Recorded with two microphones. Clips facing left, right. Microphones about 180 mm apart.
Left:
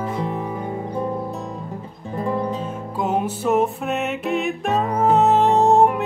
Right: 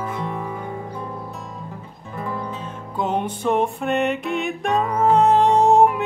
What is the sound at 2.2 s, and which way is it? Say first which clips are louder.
Music: left 6 dB; 30° left (ahead or behind).